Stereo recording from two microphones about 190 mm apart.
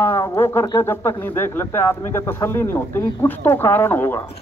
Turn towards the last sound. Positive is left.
turn(degrees=10)  # may be behind; listen again after turning